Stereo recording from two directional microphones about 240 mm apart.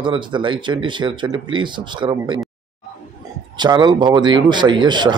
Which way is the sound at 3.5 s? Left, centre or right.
Centre.